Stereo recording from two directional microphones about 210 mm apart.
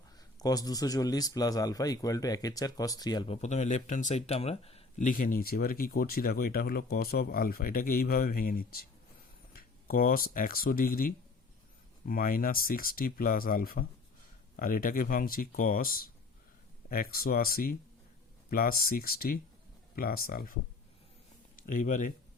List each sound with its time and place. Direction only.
0.2 s a man's voice: 15° left (ahead or behind); by 20.6 s 45° left (ahead or behind)
21.7 s a man's voice: 40° left (ahead or behind)